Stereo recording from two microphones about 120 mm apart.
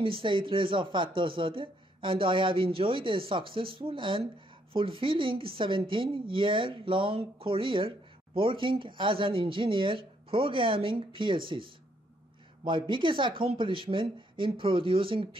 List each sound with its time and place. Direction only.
0.0 s speech: 45° right (ahead or behind)